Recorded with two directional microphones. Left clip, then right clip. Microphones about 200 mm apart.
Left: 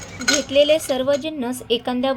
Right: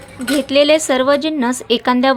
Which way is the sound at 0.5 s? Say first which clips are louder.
Right 4 dB; 65° right (ahead or behind).